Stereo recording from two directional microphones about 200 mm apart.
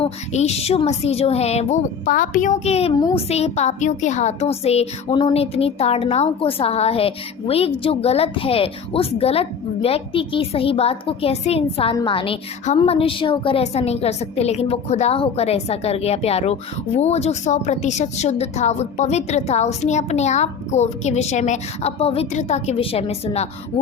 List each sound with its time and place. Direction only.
0.0 s a woman's voice: 30° left (ahead or behind)